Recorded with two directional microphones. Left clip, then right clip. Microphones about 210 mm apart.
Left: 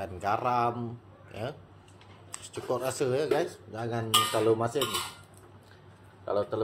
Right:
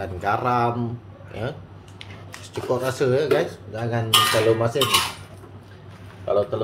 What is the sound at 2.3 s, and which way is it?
Speech, 15° left (ahead or behind).